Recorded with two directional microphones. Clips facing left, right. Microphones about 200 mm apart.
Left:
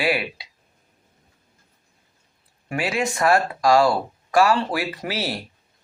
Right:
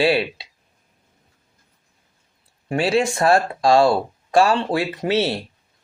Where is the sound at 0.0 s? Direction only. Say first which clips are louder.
Right 5 dB; 30° right (ahead or behind).